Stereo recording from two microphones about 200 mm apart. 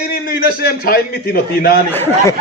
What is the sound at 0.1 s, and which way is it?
A man's voice, 45° left (ahead or behind).